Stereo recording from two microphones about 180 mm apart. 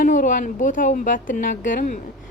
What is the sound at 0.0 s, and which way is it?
A woman's voice, 50° left (ahead or behind).